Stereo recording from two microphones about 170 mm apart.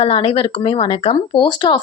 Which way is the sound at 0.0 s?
35° left (ahead or behind).